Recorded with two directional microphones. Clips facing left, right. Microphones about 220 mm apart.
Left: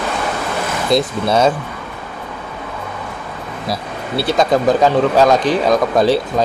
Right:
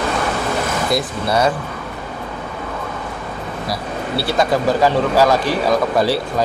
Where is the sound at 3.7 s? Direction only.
20° left (ahead or behind).